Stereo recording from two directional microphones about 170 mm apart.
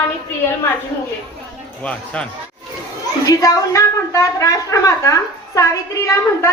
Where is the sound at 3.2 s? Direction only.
20° left (ahead or behind).